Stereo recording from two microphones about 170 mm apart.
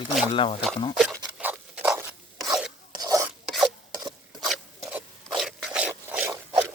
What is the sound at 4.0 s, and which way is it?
Stir, 25° right (ahead or behind).